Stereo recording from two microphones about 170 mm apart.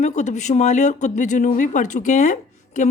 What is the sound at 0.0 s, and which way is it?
Speech, 45° left (ahead or behind).